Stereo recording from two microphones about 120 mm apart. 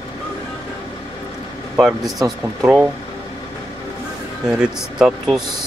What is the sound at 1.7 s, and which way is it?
Speech, centre (ahead or behind).